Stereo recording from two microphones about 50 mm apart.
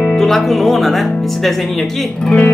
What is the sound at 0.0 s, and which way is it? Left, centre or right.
Speech, centre.